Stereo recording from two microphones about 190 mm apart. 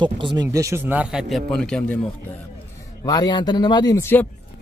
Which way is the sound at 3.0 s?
20° left (ahead or behind).